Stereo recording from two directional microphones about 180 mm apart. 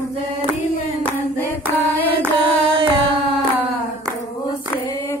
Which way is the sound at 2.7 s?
30° right (ahead or behind).